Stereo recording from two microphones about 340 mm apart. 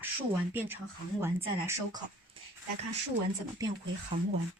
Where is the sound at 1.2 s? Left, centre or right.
Centre.